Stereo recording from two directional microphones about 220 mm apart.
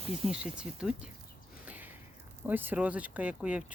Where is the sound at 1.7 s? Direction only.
10° right (ahead or behind).